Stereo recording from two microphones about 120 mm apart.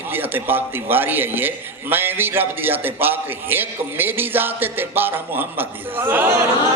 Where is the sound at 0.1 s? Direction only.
15° right (ahead or behind).